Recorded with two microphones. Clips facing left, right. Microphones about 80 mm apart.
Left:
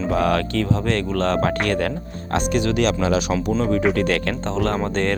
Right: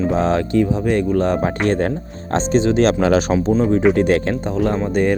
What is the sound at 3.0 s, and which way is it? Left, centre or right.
Speech, right.